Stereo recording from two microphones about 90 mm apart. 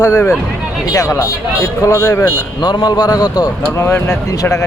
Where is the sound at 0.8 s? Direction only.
40° left (ahead or behind).